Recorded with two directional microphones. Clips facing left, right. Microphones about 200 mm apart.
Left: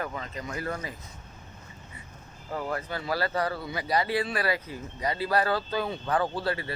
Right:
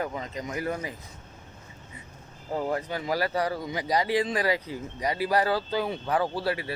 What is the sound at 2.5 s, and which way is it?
Speech, 20° right (ahead or behind).